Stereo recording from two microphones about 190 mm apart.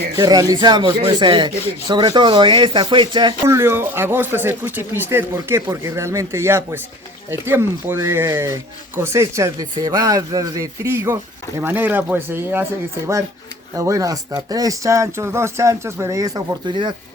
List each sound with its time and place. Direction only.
0.2 s speech: 20° right (ahead or behind)
3.4 s speech: 15° right (ahead or behind)
13.7 s speech: 15° right (ahead or behind)